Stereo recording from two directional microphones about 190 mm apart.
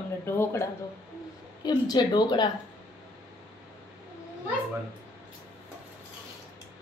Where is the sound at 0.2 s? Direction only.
10° left (ahead or behind).